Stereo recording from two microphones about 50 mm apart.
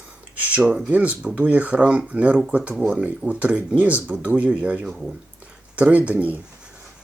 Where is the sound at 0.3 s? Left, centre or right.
Right.